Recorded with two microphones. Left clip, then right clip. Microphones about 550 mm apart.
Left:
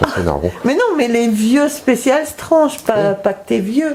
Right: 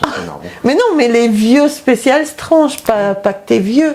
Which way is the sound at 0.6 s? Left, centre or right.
Right.